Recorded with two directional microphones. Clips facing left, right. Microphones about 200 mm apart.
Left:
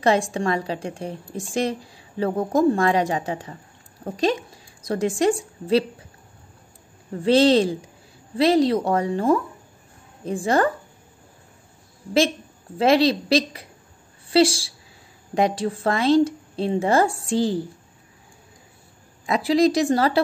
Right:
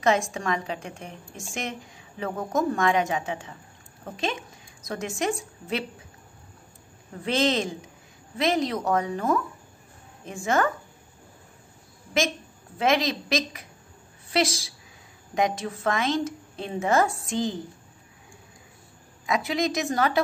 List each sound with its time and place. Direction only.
0.0 s a woman's voice: 30° left (ahead or behind)
7.2 s a woman's voice: 35° left (ahead or behind)
12.7 s a woman's voice: 30° left (ahead or behind)
19.2 s a woman's voice: 35° left (ahead or behind)